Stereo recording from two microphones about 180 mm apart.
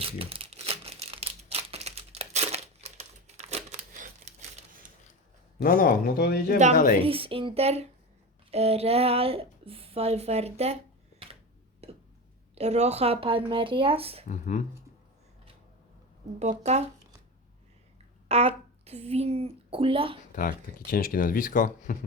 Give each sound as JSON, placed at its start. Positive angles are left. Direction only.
{"t": 0.0, "sound": "crumpling", "side_deg": -30}
{"t": 5.5, "sound": "speech", "side_deg": 55}
{"t": 7.0, "sound": "speech", "side_deg": -30}
{"t": 11.8, "sound": "a sound", "side_deg": -35}
{"t": 12.5, "sound": "speech", "side_deg": -35}
{"t": 14.3, "sound": "speech", "side_deg": 45}
{"t": 16.4, "sound": "speech", "side_deg": -40}
{"t": 18.3, "sound": "speech", "side_deg": -35}
{"t": 20.3, "sound": "speech", "side_deg": 50}